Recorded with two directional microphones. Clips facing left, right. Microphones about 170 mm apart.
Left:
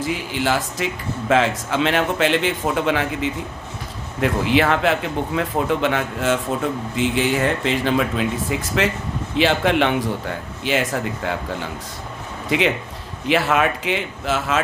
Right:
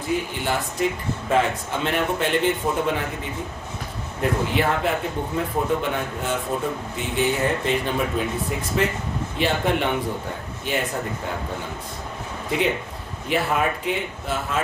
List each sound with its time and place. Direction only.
0.0 s speech: 90° left
12.5 s speech: 90° left